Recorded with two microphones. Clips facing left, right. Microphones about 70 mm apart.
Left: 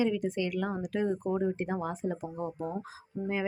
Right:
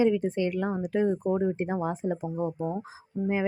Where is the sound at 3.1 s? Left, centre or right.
Centre.